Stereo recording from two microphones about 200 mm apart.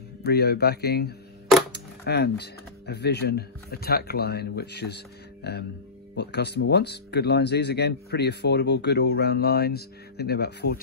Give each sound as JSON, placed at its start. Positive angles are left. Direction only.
{"t": 0.2, "sound": "speech", "side_deg": 55}